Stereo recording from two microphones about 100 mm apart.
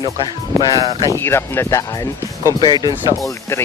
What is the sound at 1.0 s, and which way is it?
Speech, 25° left (ahead or behind).